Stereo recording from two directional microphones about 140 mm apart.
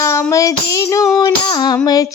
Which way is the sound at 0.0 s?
20° left (ahead or behind).